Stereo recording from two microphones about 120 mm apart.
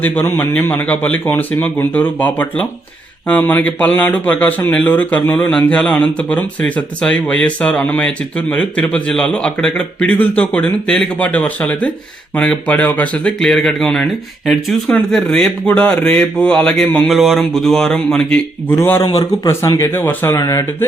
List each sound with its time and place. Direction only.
0.0 s speech: 15° left (ahead or behind)
18.7 s speech: 20° left (ahead or behind)
19.0 s a man's voice: 35° left (ahead or behind)
19.5 s speech: 25° left (ahead or behind)